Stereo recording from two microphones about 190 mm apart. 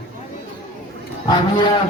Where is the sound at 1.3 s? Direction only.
25° left (ahead or behind).